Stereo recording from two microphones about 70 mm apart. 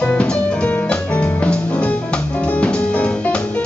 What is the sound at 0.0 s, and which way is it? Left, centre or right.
Music, centre.